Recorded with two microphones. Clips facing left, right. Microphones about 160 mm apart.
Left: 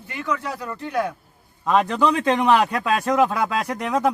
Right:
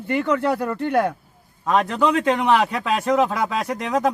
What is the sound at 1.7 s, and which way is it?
Speech, 10° right (ahead or behind).